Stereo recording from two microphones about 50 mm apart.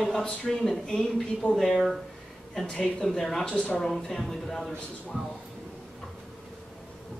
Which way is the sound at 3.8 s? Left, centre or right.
Centre.